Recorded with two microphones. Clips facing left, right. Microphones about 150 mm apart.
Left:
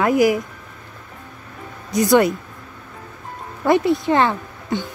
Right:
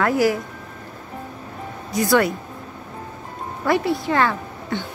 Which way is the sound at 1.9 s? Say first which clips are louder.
Left 3 dB; 20° left (ahead or behind).